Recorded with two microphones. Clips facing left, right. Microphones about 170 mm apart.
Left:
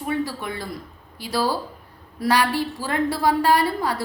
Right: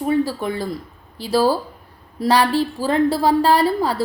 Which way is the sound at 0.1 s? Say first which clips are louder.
Right 6 dB; 30° right (ahead or behind).